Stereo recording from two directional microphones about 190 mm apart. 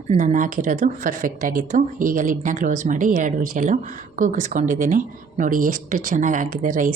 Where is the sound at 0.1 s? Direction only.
40° right (ahead or behind).